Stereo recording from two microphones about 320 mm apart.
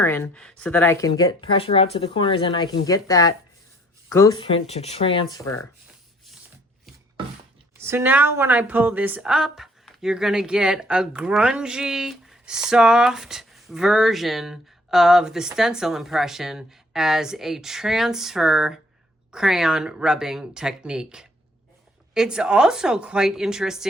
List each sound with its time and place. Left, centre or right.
0.0 s speech: centre
7.8 s a woman's voice: centre